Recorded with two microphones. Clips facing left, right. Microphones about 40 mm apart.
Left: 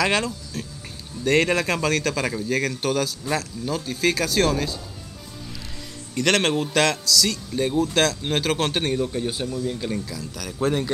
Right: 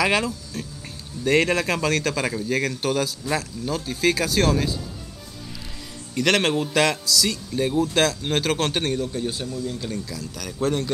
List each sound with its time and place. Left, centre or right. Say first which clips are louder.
0.0 s a man's voice: right 1 dB; centre
6.1 s a man's voice: even; centre
10.0 s a man's voice: even; centre